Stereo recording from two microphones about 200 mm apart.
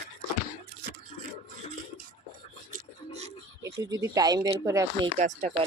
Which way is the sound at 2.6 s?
40° right (ahead or behind).